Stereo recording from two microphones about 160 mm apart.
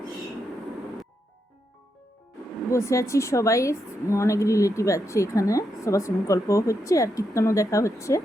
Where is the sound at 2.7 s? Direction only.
20° left (ahead or behind).